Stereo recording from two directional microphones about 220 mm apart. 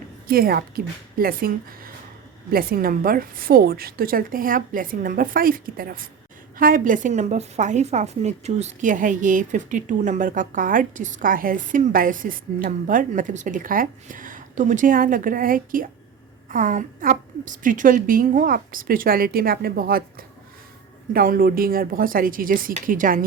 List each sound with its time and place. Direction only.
0.3 s a woman's voice: 40° right (ahead or behind)